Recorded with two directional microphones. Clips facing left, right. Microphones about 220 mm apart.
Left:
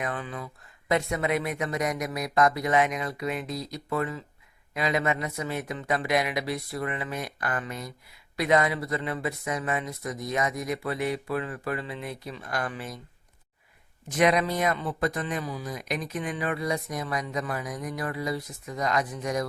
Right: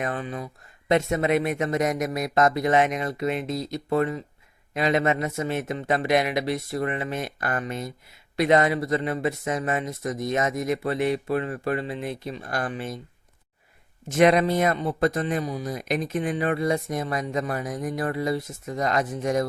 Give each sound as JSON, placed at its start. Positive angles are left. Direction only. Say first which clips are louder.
{"t": 0.0, "sound": "speech", "louder": "right 4 dB", "side_deg": -25}
{"t": 1.5, "sound": "speech", "louder": "right 5 dB", "side_deg": -45}
{"t": 2.0, "sound": "speech", "louder": "right 2 dB", "side_deg": -25}
{"t": 14.2, "sound": "speech", "louder": "right 5 dB", "side_deg": -45}
{"t": 14.8, "sound": "speech", "louder": "right 5 dB", "side_deg": -25}
{"t": 15.1, "sound": "speech", "louder": "right 5 dB", "side_deg": -50}
{"t": 15.8, "sound": "speech", "louder": "right 7 dB", "side_deg": -25}
{"t": 16.2, "sound": "speech", "louder": "right 5 dB", "side_deg": -50}
{"t": 16.7, "sound": "speech", "louder": "right 4 dB", "side_deg": -25}
{"t": 17.6, "sound": "speech", "louder": "right 5 dB", "side_deg": -45}
{"t": 17.9, "sound": "speech", "louder": "right 5 dB", "side_deg": -25}
{"t": 18.6, "sound": "speech", "louder": "right 1 dB", "side_deg": -45}